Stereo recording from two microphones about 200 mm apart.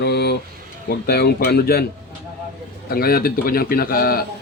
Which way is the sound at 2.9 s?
50° left (ahead or behind).